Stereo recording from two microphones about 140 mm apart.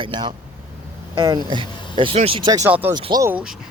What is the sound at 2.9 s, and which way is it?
Speech, 30° right (ahead or behind).